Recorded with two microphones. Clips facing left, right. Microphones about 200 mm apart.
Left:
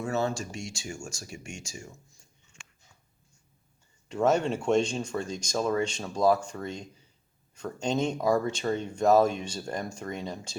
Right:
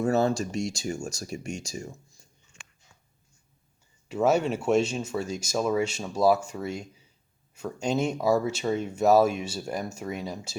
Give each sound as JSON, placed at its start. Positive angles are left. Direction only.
{"t": 0.0, "sound": "speech", "side_deg": -35}
{"t": 4.1, "sound": "speech", "side_deg": -10}